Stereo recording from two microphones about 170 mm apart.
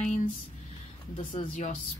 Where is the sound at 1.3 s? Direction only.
45° left (ahead or behind).